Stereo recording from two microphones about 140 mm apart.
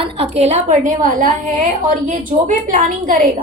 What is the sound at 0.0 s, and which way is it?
A woman's voice, 40° right (ahead or behind).